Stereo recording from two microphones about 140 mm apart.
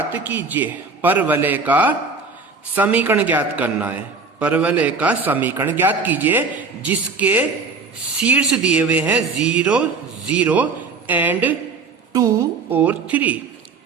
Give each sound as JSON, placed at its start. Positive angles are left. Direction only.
{"t": 0.1, "sound": "a man's voice", "side_deg": -10}
{"t": 12.1, "sound": "a woman's voice", "side_deg": -25}
{"t": 12.7, "sound": "a man's voice", "side_deg": -10}